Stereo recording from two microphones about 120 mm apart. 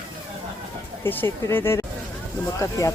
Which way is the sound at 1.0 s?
20° left (ahead or behind).